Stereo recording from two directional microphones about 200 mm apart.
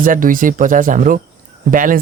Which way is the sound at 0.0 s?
45° right (ahead or behind).